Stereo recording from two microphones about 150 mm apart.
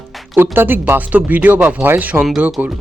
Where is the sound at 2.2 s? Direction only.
Centre (ahead or behind).